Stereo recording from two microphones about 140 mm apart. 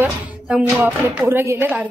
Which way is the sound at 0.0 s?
5° right (ahead or behind).